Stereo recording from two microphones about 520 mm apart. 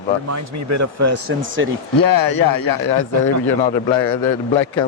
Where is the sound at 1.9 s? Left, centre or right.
Left.